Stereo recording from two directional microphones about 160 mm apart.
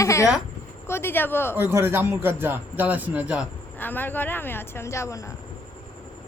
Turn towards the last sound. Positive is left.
turn(degrees=20)  # may be behind; listen again after turning